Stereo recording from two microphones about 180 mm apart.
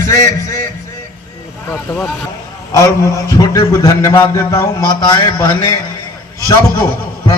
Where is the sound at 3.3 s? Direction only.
20° left (ahead or behind).